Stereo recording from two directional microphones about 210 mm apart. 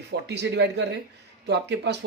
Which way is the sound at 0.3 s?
55° right (ahead or behind).